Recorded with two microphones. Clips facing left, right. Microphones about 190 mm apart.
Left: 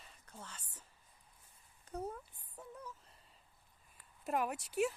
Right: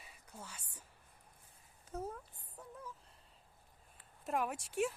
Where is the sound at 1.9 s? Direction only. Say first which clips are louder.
Left 1 dB; centre (ahead or behind).